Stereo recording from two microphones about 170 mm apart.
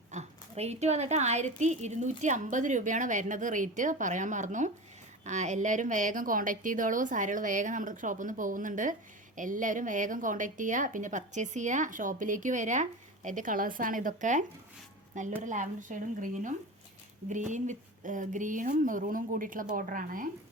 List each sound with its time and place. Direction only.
0.1 s a woman's voice: 40° right (ahead or behind)